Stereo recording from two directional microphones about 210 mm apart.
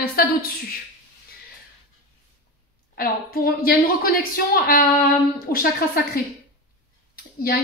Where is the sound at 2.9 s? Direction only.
45° left (ahead or behind).